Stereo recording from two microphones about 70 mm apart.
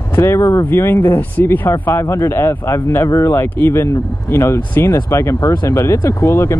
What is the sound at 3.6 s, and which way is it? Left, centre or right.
Speech, left.